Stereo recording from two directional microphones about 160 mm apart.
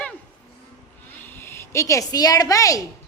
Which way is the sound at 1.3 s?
15° left (ahead or behind).